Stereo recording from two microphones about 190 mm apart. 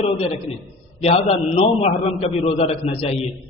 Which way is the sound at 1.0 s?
35° left (ahead or behind).